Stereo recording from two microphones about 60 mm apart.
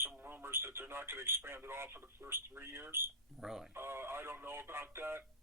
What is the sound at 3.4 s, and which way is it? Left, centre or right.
Speech, centre.